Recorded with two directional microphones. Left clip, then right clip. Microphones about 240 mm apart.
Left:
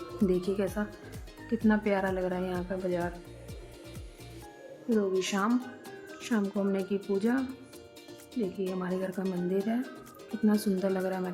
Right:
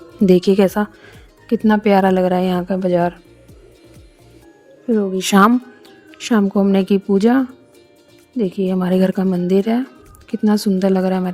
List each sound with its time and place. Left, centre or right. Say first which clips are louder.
0.3 s speech: right 17 dB; right
4.9 s speech: right 15 dB; right